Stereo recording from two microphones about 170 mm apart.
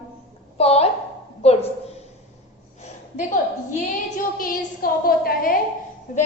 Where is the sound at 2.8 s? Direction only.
45° left (ahead or behind).